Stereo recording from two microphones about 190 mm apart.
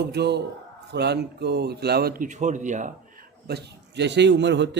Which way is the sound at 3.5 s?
60° right (ahead or behind).